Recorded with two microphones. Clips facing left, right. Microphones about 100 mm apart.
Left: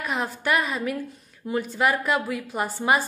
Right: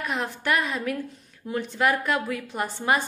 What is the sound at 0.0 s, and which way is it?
A woman's voice, 5° left (ahead or behind).